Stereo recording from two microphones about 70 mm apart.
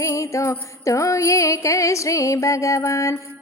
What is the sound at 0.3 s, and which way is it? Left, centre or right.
Music, left.